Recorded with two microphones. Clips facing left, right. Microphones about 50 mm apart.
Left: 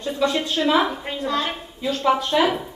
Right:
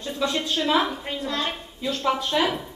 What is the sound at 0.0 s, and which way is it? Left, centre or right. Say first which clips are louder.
A woman's voice: left 4 dB; centre.